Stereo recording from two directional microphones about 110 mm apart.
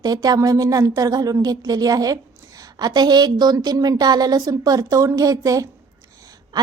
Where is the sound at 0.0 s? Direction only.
35° right (ahead or behind).